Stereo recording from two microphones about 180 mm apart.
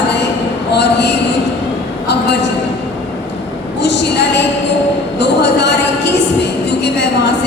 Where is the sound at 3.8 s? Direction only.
70° left (ahead or behind).